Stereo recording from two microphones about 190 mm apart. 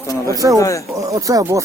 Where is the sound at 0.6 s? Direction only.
15° left (ahead or behind).